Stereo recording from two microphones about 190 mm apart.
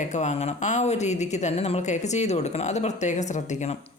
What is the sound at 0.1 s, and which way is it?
Speech, 35° left (ahead or behind).